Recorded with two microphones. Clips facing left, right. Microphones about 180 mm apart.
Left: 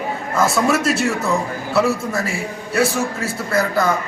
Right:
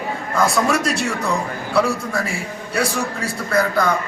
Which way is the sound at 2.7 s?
5° left (ahead or behind).